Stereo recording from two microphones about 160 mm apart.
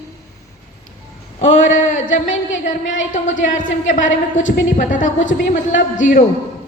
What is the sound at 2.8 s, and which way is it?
Music, 50° left (ahead or behind).